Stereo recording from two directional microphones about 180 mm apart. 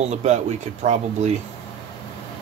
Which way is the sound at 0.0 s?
40° right (ahead or behind).